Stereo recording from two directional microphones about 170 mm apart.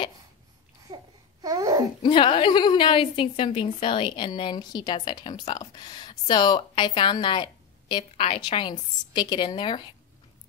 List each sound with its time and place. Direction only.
0.9 s babbling: 20° right (ahead or behind)
2.0 s a woman's voice: 30° left (ahead or behind)